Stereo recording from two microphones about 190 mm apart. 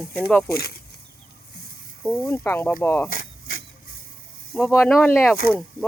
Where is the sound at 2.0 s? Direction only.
5° left (ahead or behind).